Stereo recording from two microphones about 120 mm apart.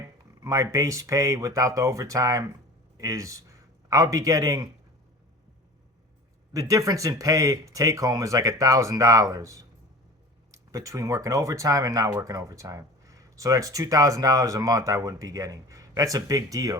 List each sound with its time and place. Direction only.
0.4 s a man's voice: 25° right (ahead or behind)
6.5 s speech: 30° right (ahead or behind)